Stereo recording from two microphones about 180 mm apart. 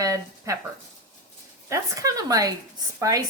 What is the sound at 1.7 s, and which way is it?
Speech, 20° right (ahead or behind).